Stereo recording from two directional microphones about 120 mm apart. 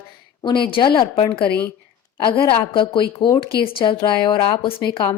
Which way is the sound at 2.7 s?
40° left (ahead or behind).